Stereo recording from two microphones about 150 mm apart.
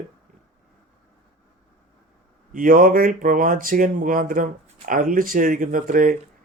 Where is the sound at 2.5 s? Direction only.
60° right (ahead or behind).